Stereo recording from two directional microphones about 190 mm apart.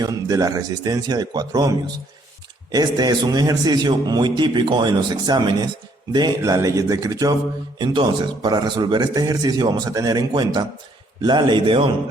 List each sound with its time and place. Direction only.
0.0 s a man's voice: 20° right (ahead or behind)
2.7 s a man's voice: 20° right (ahead or behind)